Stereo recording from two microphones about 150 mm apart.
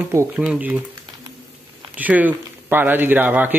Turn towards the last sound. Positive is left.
turn(degrees=-10)  # may be behind; listen again after turning